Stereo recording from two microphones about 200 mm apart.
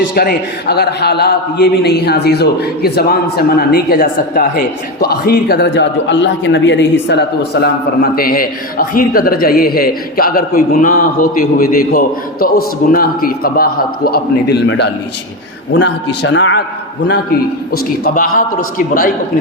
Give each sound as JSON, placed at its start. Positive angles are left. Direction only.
{"t": 0.1, "sound": "a man's voice", "side_deg": 50}
{"t": 15.7, "sound": "a man's voice", "side_deg": 60}
{"t": 17.7, "sound": "a man's voice", "side_deg": 45}